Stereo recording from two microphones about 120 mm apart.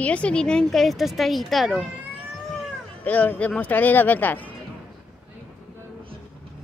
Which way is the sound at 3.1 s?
15° left (ahead or behind).